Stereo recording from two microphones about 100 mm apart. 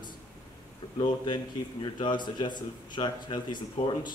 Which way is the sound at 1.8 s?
50° left (ahead or behind).